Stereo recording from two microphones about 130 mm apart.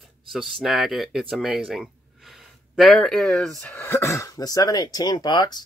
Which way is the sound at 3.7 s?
20° left (ahead or behind).